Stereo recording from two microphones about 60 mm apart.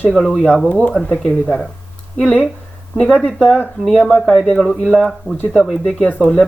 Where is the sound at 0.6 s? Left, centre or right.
Centre.